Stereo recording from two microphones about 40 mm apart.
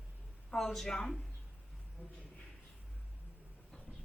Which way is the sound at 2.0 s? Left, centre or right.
Right.